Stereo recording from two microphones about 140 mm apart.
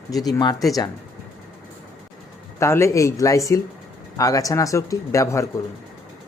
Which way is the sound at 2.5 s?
20° left (ahead or behind).